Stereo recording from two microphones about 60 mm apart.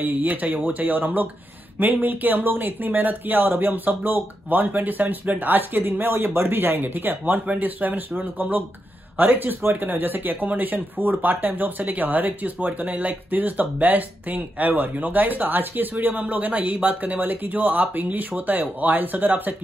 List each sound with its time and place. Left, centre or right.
0.0 s speech: right